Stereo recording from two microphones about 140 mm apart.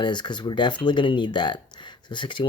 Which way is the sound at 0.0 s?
35° left (ahead or behind).